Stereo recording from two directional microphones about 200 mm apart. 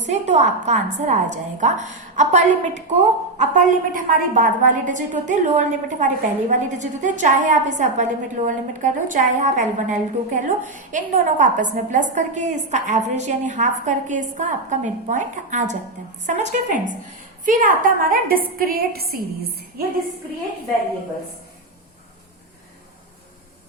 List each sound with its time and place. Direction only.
0.1 s a woman's voice: 35° right (ahead or behind)